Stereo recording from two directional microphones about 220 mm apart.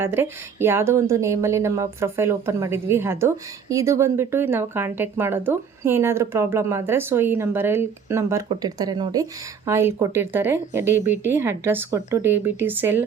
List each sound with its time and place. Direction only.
0.0 s speech: 10° right (ahead or behind)